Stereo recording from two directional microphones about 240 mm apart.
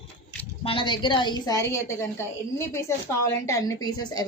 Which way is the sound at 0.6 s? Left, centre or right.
Left.